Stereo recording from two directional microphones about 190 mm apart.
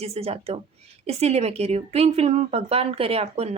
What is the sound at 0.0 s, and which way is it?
A woman's voice, 30° right (ahead or behind).